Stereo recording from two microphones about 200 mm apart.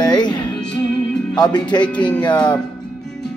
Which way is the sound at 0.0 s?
20° left (ahead or behind).